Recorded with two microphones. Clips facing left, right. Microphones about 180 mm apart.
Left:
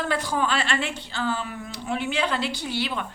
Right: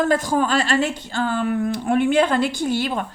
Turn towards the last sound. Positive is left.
turn(degrees=-45)  # may be behind; listen again after turning